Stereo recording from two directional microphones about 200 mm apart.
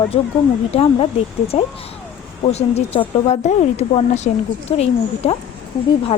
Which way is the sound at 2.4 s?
30° left (ahead or behind).